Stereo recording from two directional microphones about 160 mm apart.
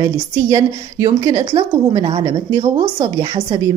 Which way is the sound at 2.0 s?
35° right (ahead or behind).